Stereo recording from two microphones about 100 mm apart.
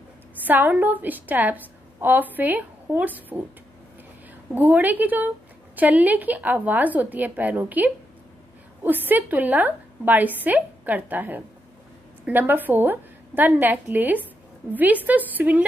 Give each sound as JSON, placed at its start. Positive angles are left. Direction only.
{"t": 0.5, "sound": "a woman's voice", "side_deg": -15}
{"t": 4.6, "sound": "a woman's voice", "side_deg": -15}